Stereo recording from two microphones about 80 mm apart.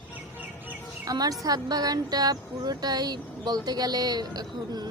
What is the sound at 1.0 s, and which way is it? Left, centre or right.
Speech, right.